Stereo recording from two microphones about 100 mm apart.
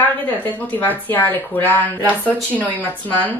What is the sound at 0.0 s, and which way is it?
Speech, 20° left (ahead or behind).